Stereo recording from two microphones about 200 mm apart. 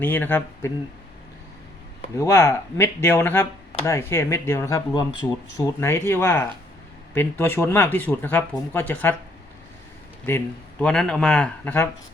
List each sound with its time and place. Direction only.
0.0 s speech: 10° left (ahead or behind)
2.1 s speech: 15° left (ahead or behind)
10.2 s speech: 10° left (ahead or behind)